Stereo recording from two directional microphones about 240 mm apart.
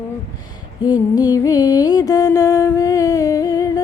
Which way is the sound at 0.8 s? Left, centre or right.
Centre.